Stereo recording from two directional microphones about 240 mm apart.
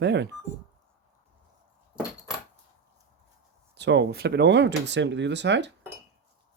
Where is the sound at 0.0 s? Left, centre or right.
Right.